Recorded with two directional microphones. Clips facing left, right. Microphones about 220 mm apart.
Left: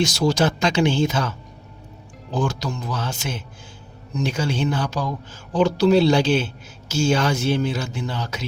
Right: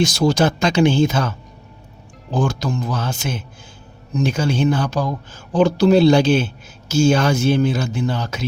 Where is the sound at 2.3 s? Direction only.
50° right (ahead or behind).